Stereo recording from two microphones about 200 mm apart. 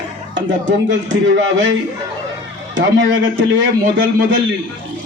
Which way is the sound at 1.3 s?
65° right (ahead or behind).